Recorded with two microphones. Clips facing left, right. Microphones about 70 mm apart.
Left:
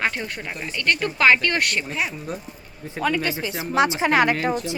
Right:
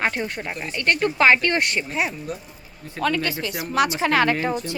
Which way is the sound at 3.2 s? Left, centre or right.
Left.